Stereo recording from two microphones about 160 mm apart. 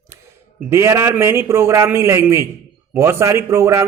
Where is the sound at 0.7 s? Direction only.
15° right (ahead or behind).